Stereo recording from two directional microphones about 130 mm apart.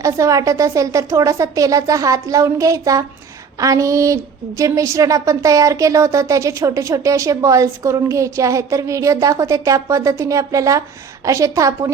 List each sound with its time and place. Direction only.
0.0 s a woman's voice: 25° right (ahead or behind)